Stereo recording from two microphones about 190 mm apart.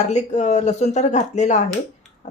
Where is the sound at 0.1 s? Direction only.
40° left (ahead or behind).